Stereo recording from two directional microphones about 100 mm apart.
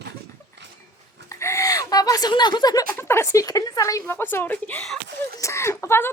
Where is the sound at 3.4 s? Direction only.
35° left (ahead or behind).